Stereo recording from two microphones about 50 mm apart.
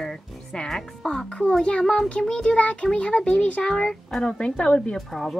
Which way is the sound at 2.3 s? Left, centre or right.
Left.